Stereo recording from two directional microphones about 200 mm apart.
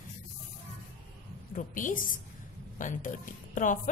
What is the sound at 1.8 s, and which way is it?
Speech, 40° left (ahead or behind).